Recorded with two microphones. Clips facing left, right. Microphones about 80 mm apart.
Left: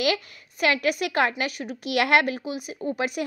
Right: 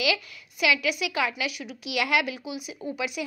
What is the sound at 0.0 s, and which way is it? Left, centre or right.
A woman's voice, left.